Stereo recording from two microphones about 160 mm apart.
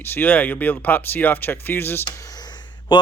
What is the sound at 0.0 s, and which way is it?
Speech, 10° left (ahead or behind).